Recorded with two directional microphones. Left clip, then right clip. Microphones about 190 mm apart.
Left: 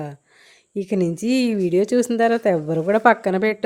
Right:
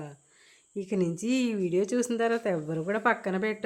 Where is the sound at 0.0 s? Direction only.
35° left (ahead or behind).